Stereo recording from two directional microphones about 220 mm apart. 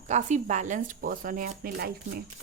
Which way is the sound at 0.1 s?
35° right (ahead or behind).